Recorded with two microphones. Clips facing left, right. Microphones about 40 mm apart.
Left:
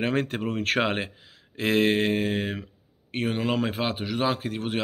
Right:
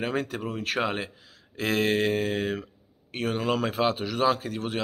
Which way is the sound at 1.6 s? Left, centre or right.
Left.